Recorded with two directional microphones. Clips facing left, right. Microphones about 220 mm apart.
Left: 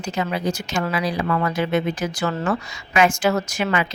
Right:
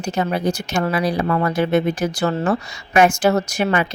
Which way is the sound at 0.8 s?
35° right (ahead or behind).